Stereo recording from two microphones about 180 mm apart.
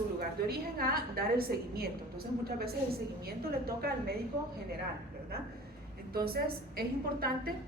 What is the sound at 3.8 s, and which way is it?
Speech, 55° right (ahead or behind).